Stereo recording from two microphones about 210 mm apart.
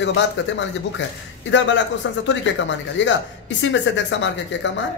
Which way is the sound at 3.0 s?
60° left (ahead or behind).